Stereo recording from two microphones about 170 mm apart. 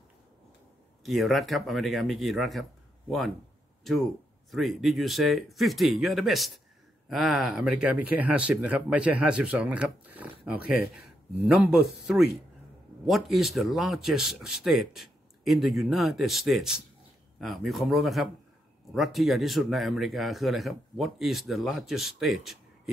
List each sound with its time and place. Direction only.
1.0 s speech: centre (ahead or behind)
4.5 s speech: centre (ahead or behind)